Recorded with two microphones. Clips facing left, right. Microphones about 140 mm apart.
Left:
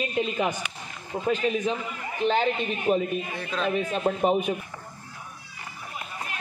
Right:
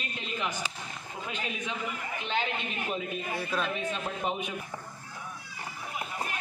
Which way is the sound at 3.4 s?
10° right (ahead or behind).